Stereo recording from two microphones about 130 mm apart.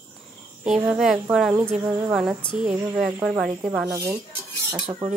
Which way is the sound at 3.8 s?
25° right (ahead or behind).